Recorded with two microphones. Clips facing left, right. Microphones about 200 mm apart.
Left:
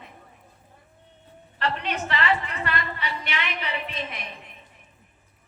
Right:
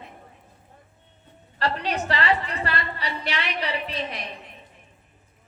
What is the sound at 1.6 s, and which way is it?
A woman's voice, 35° right (ahead or behind).